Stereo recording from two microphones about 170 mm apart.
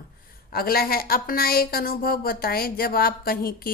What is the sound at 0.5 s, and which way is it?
A woman's voice, 60° left (ahead or behind).